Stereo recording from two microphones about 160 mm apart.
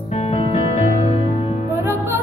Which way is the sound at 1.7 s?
15° right (ahead or behind).